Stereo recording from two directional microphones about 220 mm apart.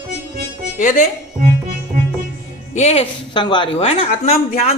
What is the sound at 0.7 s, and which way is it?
Speech, 35° left (ahead or behind).